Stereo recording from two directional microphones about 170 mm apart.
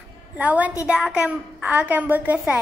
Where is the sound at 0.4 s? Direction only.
10° right (ahead or behind).